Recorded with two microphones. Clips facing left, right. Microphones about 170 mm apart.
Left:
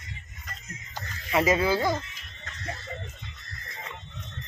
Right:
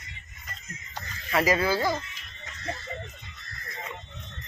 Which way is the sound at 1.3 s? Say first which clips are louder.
Left 1 dB; 20° left (ahead or behind).